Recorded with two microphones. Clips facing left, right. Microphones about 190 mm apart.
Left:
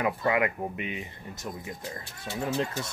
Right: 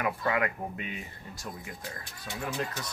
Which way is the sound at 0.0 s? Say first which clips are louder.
Left 3 dB; 20° left (ahead or behind).